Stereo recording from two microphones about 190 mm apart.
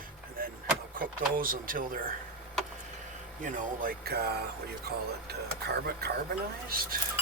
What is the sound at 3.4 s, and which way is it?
Speech, 45° right (ahead or behind).